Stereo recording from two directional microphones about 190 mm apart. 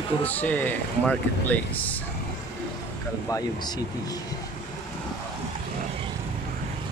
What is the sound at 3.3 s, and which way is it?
Speech, 20° left (ahead or behind).